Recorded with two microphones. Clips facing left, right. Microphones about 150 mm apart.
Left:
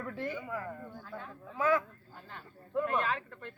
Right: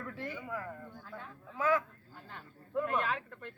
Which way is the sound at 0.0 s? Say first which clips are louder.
Left 4 dB; 25° left (ahead or behind).